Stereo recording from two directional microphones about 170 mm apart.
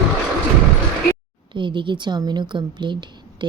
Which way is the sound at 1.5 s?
30° right (ahead or behind).